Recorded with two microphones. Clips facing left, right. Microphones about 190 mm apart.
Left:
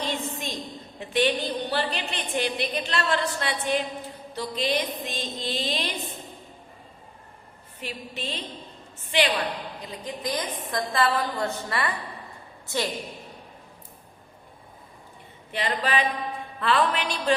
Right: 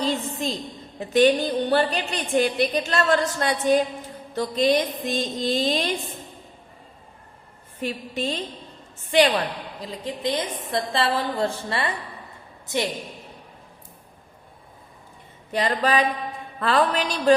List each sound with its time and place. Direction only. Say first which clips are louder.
0.0 s a sound: right 5 dB; 35° right (ahead or behind)
0.9 s a woman's voice: right 7 dB; 40° right (ahead or behind)
7.8 s a woman's voice: right 8 dB; 45° right (ahead or behind)
9.8 s a woman's voice: right 6 dB; 25° right (ahead or behind)
15.5 s a man's voice: right 4 dB; 40° right (ahead or behind)